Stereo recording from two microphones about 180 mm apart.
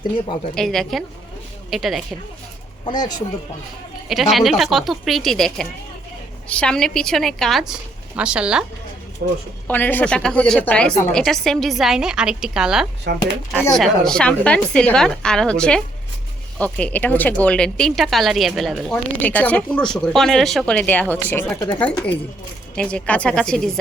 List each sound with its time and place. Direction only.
0.5 s a woman's voice: centre (ahead or behind)
2.8 s speech: 25° left (ahead or behind)
4.1 s a woman's voice: centre (ahead or behind)
9.2 s speech: 70° right (ahead or behind)
9.6 s a woman's voice: 10° left (ahead or behind)